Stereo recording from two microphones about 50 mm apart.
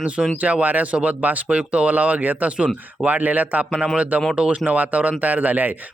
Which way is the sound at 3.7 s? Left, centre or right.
Centre.